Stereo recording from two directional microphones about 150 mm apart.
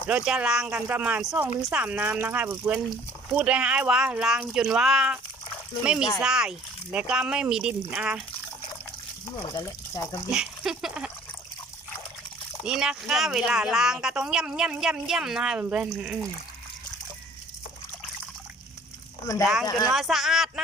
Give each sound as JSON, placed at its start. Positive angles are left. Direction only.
{"t": 0.1, "sound": "speech", "side_deg": -5}
{"t": 9.5, "sound": "speech", "side_deg": 20}
{"t": 10.3, "sound": "speech", "side_deg": -5}
{"t": 12.6, "sound": "speech", "side_deg": -5}
{"t": 19.9, "sound": "speech", "side_deg": 0}